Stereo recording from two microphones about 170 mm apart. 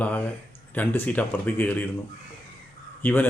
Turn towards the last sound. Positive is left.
turn(degrees=10)  # may be behind; listen again after turning